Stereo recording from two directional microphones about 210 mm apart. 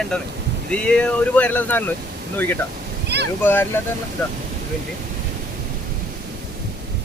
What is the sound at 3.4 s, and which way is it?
Speech, 10° left (ahead or behind).